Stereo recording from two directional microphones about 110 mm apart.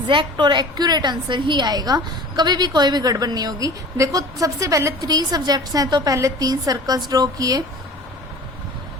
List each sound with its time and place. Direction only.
0.1 s a woman's voice: 45° right (ahead or behind)